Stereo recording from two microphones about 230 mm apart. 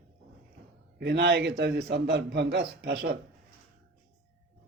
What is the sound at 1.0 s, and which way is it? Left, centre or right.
A man's voice, right.